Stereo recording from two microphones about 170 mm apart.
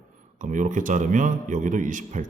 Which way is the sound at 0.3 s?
50° right (ahead or behind).